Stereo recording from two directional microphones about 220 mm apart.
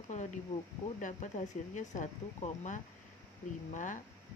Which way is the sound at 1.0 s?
35° left (ahead or behind).